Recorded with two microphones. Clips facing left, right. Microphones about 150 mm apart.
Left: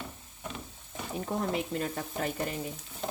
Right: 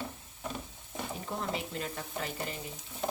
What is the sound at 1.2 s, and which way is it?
Stir, 45° left (ahead or behind).